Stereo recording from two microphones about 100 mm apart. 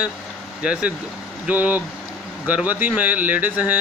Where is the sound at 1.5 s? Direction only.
15° right (ahead or behind).